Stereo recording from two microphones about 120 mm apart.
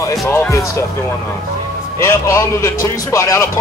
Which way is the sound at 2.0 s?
25° left (ahead or behind).